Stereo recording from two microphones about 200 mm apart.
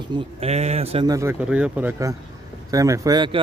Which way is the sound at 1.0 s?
15° right (ahead or behind).